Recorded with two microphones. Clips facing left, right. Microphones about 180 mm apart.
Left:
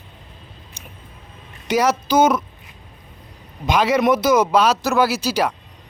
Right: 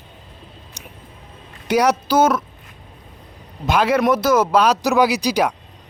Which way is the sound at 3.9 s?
5° left (ahead or behind).